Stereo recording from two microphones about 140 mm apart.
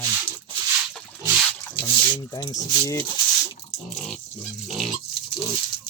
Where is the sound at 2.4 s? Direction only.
25° left (ahead or behind).